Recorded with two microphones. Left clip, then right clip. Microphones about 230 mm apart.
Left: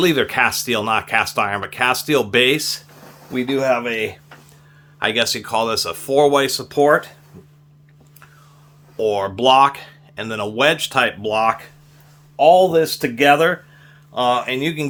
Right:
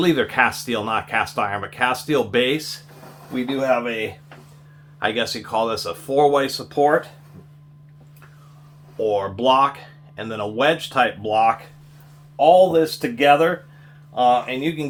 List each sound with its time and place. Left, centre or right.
0.0 s speech: left
9.0 s speech: left